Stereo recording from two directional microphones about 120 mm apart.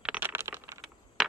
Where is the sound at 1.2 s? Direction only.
5° right (ahead or behind).